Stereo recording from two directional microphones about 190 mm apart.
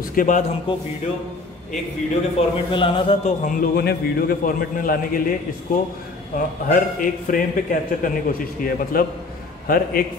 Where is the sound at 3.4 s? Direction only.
45° left (ahead or behind).